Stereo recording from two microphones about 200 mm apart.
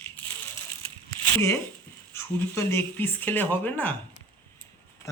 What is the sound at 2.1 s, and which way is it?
Speech, 15° left (ahead or behind).